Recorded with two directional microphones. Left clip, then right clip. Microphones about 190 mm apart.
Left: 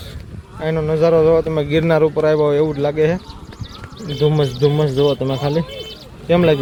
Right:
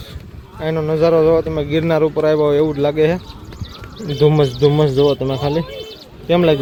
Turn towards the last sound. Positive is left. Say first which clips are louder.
# even
turn(degrees=0)  # may be behind; listen again after turning